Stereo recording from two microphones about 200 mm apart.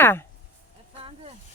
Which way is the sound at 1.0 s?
30° right (ahead or behind).